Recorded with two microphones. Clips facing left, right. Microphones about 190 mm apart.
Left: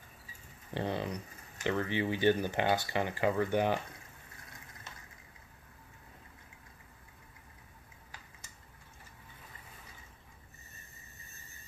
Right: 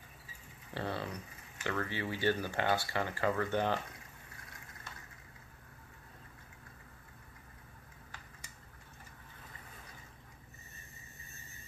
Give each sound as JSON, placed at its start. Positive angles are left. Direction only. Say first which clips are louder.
{"t": 0.7, "sound": "speech", "louder": "left 4 dB", "side_deg": 15}